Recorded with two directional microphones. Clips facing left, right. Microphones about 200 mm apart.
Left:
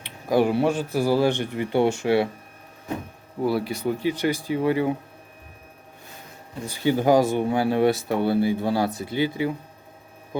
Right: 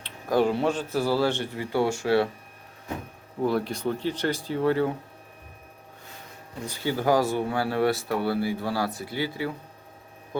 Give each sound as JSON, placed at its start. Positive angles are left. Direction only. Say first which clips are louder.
{"t": 0.0, "sound": "speech", "louder": "left 2 dB", "side_deg": 10}
{"t": 3.4, "sound": "speech", "louder": "left 2 dB", "side_deg": 10}
{"t": 6.7, "sound": "speech", "louder": "left 5 dB", "side_deg": 20}